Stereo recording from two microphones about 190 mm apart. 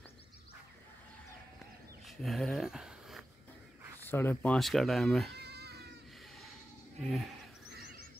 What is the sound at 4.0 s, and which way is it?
Speech, 10° left (ahead or behind).